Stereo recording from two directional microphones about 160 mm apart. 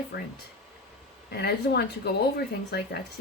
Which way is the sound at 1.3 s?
90° left.